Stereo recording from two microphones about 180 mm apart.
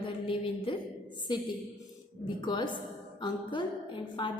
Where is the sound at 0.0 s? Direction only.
30° left (ahead or behind).